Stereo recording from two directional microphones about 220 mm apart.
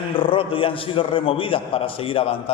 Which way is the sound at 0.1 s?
25° left (ahead or behind).